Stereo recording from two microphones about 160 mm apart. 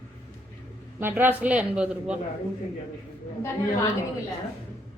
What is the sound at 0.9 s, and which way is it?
A woman's voice, 10° right (ahead or behind).